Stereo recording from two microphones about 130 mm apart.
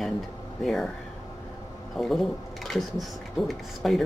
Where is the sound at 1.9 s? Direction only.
Centre (ahead or behind).